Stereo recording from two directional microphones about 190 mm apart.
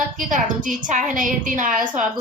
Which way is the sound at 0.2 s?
45° right (ahead or behind).